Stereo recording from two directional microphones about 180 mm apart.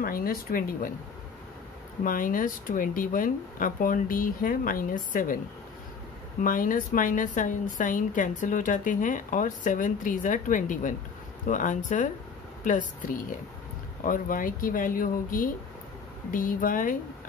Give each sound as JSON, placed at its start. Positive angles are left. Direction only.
{"t": 0.0, "sound": "a woman's voice", "side_deg": 55}
{"t": 2.0, "sound": "a woman's voice", "side_deg": 50}
{"t": 6.4, "sound": "a woman's voice", "side_deg": 50}